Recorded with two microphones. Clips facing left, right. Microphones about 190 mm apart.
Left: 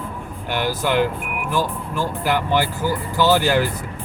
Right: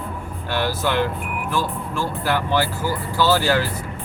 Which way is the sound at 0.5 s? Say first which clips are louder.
Left 1 dB; 15° left (ahead or behind).